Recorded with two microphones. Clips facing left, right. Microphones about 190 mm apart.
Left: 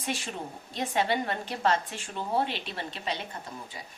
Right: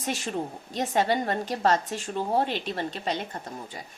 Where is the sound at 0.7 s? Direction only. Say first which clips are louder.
Right 3 dB; 40° right (ahead or behind).